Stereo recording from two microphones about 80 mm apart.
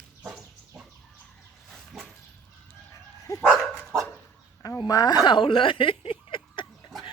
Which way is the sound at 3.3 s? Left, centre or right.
Left.